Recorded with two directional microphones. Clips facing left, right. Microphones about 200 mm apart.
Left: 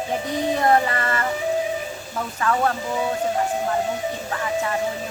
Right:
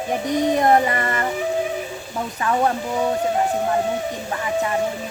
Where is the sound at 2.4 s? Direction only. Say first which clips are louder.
Right 1 dB; 20° right (ahead or behind).